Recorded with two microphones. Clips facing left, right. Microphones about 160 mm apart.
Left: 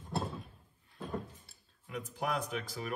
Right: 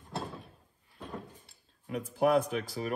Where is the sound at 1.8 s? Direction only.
40° right (ahead or behind).